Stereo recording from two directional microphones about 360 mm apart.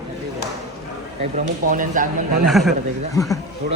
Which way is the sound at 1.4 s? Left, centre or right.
Right.